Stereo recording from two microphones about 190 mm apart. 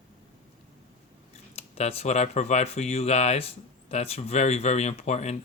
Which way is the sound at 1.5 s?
30° left (ahead or behind).